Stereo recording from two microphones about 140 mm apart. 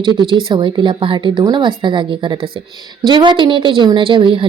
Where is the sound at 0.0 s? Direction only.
35° right (ahead or behind).